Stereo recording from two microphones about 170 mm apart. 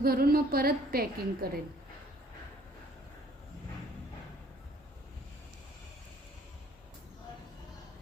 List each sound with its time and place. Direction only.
0.0 s a woman's voice: 60° right (ahead or behind)